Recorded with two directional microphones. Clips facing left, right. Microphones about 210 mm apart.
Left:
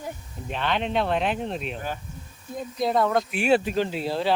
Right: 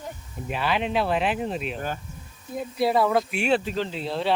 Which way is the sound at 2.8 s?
5° right (ahead or behind).